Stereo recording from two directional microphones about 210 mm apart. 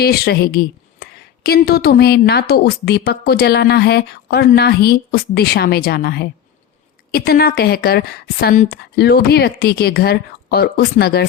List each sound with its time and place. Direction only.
0.0 s a woman's voice: 50° left (ahead or behind)